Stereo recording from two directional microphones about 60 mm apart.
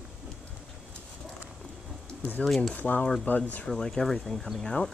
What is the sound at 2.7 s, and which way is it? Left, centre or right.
Speech, left.